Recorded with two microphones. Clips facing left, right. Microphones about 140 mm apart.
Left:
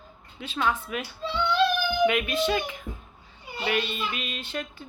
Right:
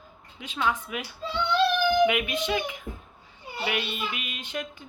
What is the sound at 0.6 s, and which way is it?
Music, 15° right (ahead or behind).